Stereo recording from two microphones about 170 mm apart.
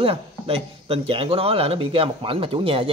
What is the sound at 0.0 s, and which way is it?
Speech, 35° right (ahead or behind).